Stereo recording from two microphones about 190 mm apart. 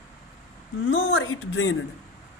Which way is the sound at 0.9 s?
90° left.